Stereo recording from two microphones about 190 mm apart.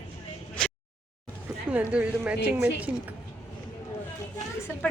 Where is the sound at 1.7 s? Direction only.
5° right (ahead or behind).